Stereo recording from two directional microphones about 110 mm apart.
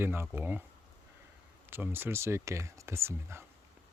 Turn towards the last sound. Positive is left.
turn(degrees=-25)  # may be behind; listen again after turning